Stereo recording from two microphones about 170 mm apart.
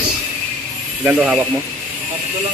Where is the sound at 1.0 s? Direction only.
10° right (ahead or behind).